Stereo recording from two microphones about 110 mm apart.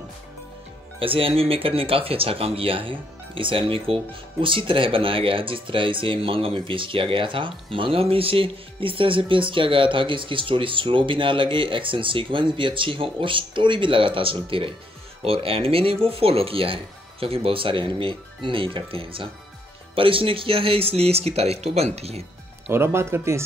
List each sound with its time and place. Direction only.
0.9 s speech: 55° right (ahead or behind); by 22.2 s 70° right (ahead or behind)
22.7 s speech: 20° right (ahead or behind)